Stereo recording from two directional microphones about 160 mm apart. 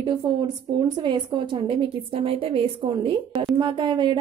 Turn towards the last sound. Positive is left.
turn(degrees=-30)  # may be behind; listen again after turning